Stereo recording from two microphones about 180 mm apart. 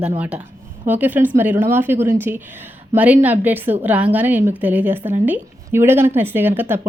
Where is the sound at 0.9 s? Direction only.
10° right (ahead or behind).